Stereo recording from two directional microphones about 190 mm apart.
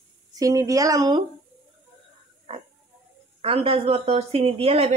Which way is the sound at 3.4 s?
30° right (ahead or behind).